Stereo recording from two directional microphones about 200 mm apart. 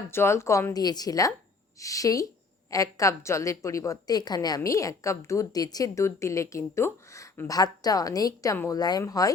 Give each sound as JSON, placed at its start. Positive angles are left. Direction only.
{"t": 0.1, "sound": "a woman's voice", "side_deg": 10}